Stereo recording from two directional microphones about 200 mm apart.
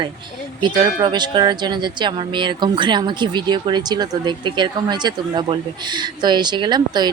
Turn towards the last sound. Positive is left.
turn(degrees=-20)  # may be behind; listen again after turning